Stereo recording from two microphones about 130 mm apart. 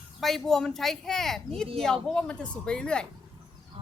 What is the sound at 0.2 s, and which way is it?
Speech, centre (ahead or behind).